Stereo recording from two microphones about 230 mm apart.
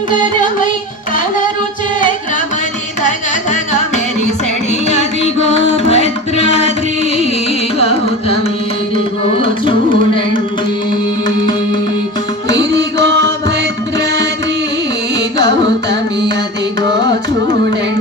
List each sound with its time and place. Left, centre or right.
0.1 s music: left
3.0 s music: left
7.8 s carnatic music: left
13.0 s music: right
15.4 s carnatic music: right